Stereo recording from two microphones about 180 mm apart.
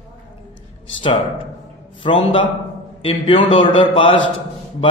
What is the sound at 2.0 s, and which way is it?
A man's voice, 30° left (ahead or behind).